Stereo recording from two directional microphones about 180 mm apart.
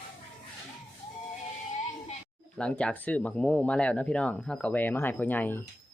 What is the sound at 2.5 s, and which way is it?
Speech, 5° left (ahead or behind).